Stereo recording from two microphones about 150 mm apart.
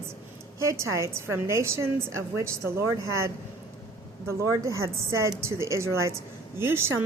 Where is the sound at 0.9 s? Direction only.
20° right (ahead or behind).